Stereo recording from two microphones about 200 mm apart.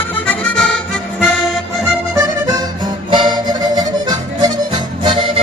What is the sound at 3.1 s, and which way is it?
Music, 20° right (ahead or behind).